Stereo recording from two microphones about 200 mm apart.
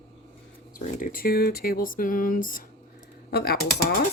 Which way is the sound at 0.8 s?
45° left (ahead or behind).